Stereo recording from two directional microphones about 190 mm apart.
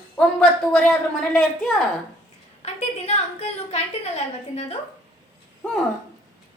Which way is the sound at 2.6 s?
35° left (ahead or behind).